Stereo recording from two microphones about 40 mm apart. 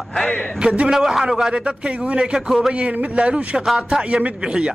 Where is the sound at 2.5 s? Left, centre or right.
Centre.